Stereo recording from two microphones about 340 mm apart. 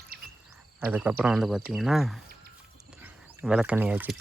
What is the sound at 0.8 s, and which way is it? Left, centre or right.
Speech, centre.